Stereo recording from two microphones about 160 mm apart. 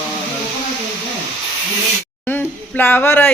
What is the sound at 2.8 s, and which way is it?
Speech, 10° left (ahead or behind).